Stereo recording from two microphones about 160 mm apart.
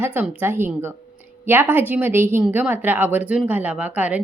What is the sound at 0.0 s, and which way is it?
Speech, 10° right (ahead or behind).